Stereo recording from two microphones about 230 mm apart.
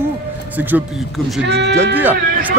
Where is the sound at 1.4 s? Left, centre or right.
Right.